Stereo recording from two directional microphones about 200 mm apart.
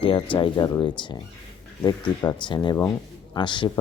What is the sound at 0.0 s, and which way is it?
Speech, 25° left (ahead or behind).